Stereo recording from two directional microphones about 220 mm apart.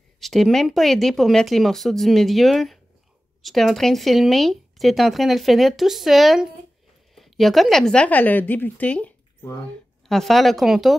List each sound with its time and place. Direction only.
0.2 s a woman's voice: centre (ahead or behind)